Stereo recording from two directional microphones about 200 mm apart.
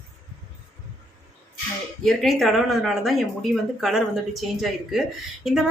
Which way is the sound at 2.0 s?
Centre (ahead or behind).